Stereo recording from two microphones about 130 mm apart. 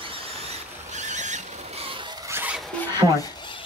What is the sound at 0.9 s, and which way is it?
Vehicle, 65° right (ahead or behind).